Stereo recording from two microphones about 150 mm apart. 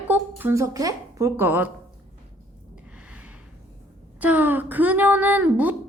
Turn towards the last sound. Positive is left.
turn(degrees=-10)  # may be behind; listen again after turning